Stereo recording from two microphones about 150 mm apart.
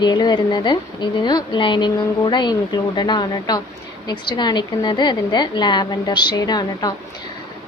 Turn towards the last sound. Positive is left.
turn(degrees=25)  # may be behind; listen again after turning